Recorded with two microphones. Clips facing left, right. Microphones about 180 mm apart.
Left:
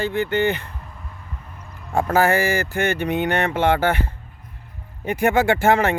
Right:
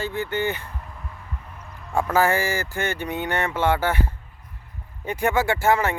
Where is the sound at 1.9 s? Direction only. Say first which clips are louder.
Left 3 dB; 40° left (ahead or behind).